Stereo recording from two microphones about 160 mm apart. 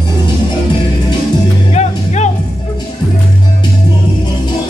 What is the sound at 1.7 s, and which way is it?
Music, 45° left (ahead or behind).